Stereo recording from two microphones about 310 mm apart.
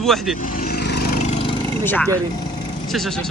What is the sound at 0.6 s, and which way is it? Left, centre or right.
Lawn mower, left.